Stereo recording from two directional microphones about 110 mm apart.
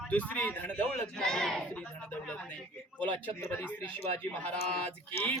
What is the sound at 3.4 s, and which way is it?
A man's voice, 15° left (ahead or behind).